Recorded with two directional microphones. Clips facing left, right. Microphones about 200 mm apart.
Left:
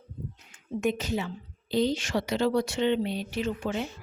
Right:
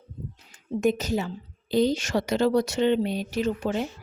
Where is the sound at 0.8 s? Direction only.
40° right (ahead or behind).